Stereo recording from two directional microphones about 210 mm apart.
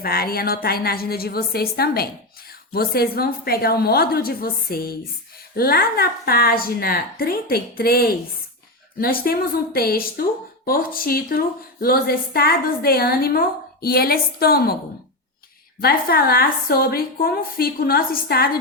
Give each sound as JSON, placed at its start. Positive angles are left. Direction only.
{"t": 0.0, "sound": "a woman's voice", "side_deg": 45}
{"t": 15.8, "sound": "a woman's voice", "side_deg": 45}